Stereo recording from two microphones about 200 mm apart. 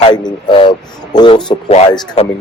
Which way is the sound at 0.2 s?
20° left (ahead or behind).